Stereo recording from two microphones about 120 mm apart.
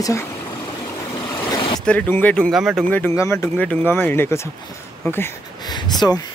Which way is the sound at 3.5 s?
15° left (ahead or behind).